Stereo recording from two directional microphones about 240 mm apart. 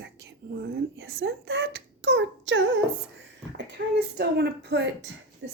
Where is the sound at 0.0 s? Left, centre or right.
Right.